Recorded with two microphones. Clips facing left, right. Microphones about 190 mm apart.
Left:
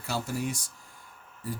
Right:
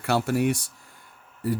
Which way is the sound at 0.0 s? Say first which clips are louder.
Right 9 dB; 70° right (ahead or behind).